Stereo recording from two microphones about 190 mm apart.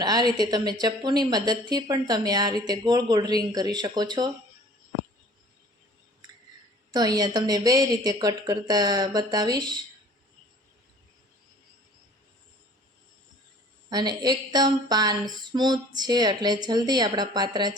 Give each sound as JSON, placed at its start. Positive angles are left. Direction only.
{"t": 0.0, "sound": "a woman's voice", "side_deg": -20}
{"t": 6.9, "sound": "a woman's voice", "side_deg": -20}
{"t": 13.9, "sound": "a woman's voice", "side_deg": -20}